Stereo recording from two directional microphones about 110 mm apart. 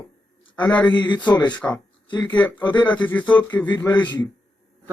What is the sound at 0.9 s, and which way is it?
A man's voice, 45° left (ahead or behind).